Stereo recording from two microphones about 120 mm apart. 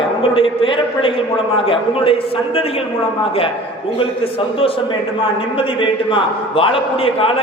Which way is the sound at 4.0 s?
50° left (ahead or behind).